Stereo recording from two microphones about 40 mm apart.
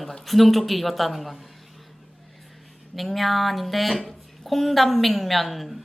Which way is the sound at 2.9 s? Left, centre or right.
Centre.